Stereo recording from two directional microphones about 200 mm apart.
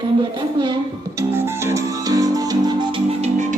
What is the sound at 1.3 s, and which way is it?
Music, 10° right (ahead or behind).